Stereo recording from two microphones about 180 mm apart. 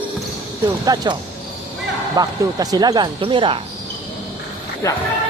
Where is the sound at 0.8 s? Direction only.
20° right (ahead or behind).